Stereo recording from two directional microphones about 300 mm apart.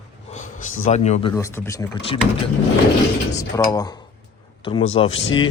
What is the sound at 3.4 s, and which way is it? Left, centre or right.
Speech, centre.